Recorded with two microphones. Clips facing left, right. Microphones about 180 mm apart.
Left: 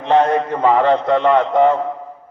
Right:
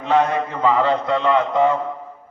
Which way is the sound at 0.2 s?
50° left (ahead or behind).